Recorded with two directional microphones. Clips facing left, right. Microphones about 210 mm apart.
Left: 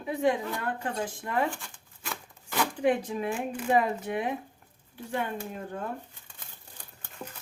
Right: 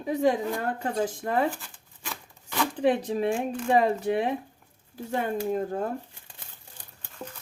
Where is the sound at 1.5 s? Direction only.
Centre (ahead or behind).